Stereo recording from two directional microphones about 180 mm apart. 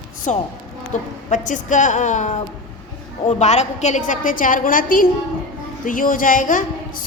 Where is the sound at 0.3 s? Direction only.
40° left (ahead or behind).